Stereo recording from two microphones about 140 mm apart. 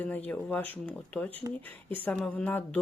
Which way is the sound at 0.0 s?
10° left (ahead or behind).